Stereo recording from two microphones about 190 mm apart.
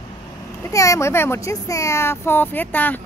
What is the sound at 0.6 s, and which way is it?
A woman's voice, 15° left (ahead or behind).